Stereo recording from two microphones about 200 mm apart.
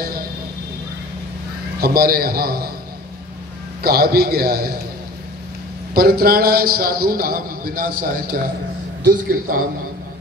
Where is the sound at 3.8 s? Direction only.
50° right (ahead or behind).